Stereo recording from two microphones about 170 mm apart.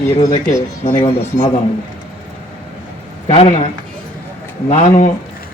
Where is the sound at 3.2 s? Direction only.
35° left (ahead or behind).